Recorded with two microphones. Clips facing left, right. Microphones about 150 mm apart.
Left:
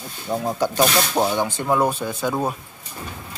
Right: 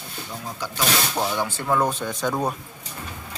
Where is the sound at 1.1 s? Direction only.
20° left (ahead or behind).